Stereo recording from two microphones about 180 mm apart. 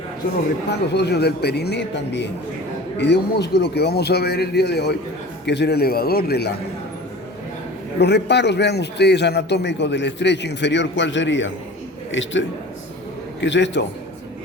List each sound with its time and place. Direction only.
0.9 s a man's voice: 65° left (ahead or behind)
7.9 s a man's voice: 70° left (ahead or behind)